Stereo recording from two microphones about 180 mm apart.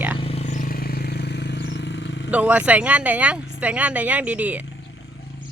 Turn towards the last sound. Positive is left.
turn(degrees=-10)  # may be behind; listen again after turning